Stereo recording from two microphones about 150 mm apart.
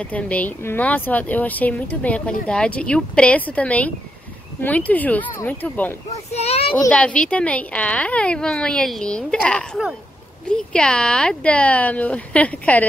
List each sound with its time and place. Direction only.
0.0 s a woman's voice: 10° left (ahead or behind)
6.3 s a child's voice: 45° left (ahead or behind)
6.9 s a woman's voice: 10° left (ahead or behind)